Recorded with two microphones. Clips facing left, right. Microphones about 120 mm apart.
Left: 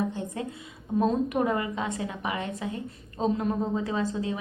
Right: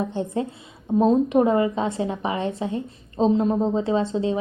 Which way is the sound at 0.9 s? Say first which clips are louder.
Right 7 dB; 25° right (ahead or behind).